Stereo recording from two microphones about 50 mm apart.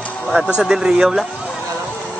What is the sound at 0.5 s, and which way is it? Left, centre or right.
Speech, centre.